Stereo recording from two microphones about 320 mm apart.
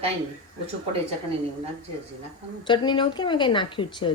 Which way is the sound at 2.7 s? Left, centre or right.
Centre.